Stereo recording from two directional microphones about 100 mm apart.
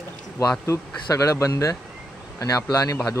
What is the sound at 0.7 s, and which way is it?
Speech, 30° left (ahead or behind).